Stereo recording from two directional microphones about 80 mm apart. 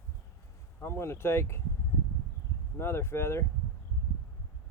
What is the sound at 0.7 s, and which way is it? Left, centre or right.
Speech, left.